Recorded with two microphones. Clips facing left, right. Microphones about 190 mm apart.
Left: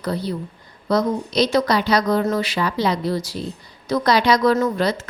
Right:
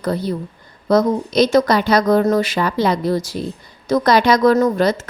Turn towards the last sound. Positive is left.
turn(degrees=-45)  # may be behind; listen again after turning